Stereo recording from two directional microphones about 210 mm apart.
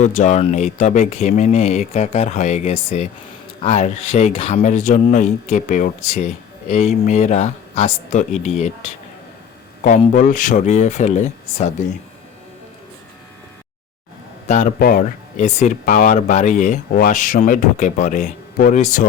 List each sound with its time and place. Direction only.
0.0 s speech: 35° left (ahead or behind)
9.8 s speech: 35° left (ahead or behind)
14.4 s speech: 40° left (ahead or behind)